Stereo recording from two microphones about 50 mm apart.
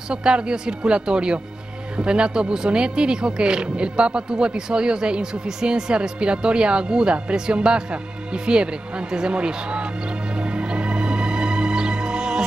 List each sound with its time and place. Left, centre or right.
0.1 s speech: centre
10.3 s music: right